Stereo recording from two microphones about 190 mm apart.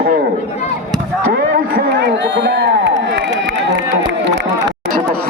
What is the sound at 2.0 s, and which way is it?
Speech, 65° right (ahead or behind).